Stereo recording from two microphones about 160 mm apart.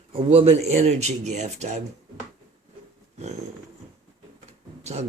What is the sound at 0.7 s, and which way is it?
Speech, 45° right (ahead or behind).